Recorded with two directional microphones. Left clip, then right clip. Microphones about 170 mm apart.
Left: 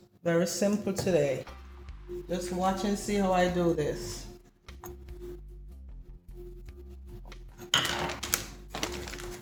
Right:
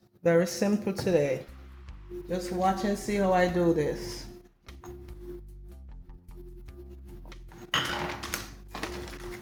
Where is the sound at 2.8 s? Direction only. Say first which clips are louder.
Right 2 dB; 35° right (ahead or behind).